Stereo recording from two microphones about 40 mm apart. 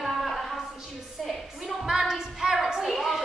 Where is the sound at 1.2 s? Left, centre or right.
Centre.